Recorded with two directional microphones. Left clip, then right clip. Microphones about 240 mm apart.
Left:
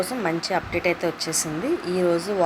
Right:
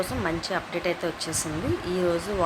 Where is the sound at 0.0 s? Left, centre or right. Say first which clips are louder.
Left 3 dB; centre.